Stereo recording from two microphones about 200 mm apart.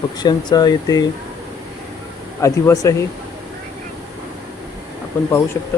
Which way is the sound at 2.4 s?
15° left (ahead or behind).